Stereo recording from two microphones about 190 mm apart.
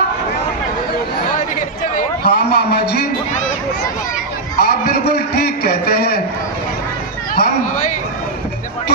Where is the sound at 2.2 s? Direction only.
60° left (ahead or behind).